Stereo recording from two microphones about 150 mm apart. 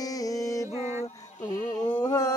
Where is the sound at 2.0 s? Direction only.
20° left (ahead or behind).